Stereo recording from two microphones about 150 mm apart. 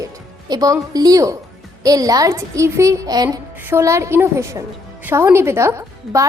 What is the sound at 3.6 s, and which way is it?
A woman's voice, 15° right (ahead or behind).